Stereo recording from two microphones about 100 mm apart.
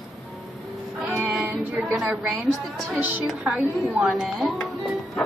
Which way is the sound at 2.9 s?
15° right (ahead or behind).